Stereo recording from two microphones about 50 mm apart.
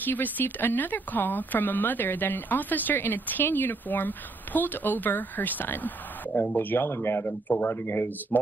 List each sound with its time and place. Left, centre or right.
0.0 s speech: left
7.2 s speech: left
7.6 s speech: left